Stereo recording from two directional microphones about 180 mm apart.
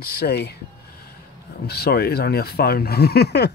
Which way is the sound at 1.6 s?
60° left (ahead or behind).